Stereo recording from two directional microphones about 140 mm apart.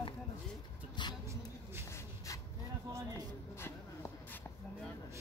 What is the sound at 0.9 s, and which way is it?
Vehicle, 35° left (ahead or behind).